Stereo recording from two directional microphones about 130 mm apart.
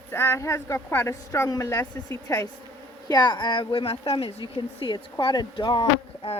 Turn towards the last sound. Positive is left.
turn(degrees=40)  # may be behind; listen again after turning